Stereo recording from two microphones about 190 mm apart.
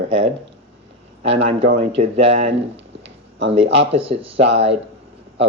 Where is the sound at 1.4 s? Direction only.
30° right (ahead or behind).